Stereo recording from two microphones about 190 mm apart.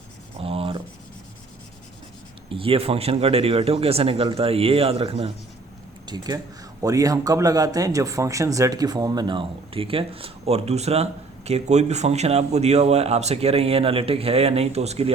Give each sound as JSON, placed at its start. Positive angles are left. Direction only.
{"t": 0.3, "sound": "writing", "side_deg": -30}
{"t": 2.5, "sound": "speech", "side_deg": -30}